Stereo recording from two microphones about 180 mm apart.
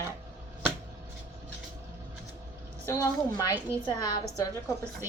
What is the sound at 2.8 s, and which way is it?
A woman's voice, 15° left (ahead or behind).